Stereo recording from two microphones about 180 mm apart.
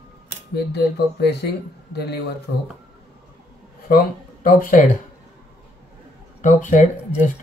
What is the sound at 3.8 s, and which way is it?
Speech, 55° left (ahead or behind).